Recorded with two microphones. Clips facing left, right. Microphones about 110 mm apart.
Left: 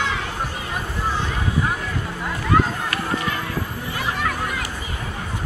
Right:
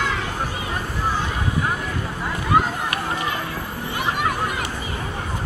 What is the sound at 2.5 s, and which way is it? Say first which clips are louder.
Run: even; 10° right (ahead or behind).